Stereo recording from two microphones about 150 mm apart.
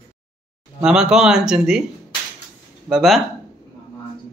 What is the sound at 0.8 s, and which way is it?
Speech, 5° right (ahead or behind).